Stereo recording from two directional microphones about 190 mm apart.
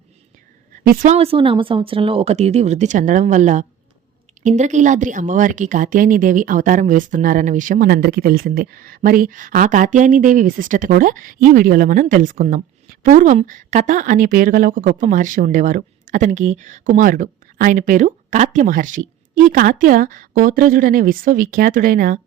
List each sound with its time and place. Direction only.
0.9 s a woman's voice: 35° right (ahead or behind)